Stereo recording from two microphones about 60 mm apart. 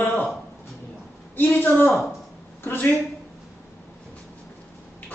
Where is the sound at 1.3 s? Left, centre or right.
Left.